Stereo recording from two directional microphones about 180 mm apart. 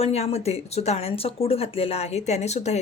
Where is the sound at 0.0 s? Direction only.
35° left (ahead or behind).